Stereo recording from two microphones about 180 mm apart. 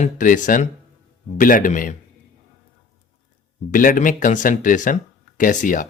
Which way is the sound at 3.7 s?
50° left (ahead or behind).